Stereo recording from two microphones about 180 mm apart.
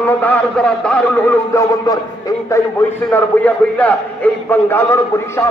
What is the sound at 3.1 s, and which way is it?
A man's voice, 10° left (ahead or behind).